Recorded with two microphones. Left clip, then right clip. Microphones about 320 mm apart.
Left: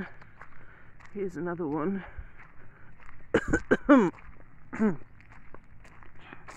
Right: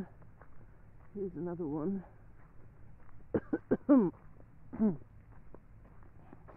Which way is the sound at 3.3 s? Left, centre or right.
Left.